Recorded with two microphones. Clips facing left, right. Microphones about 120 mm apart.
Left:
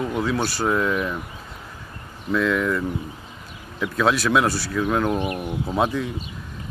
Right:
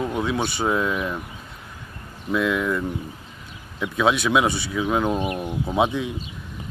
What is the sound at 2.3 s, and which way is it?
Speech, 5° right (ahead or behind).